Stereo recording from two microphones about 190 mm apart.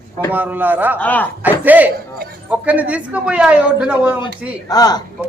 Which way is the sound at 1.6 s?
10° right (ahead or behind).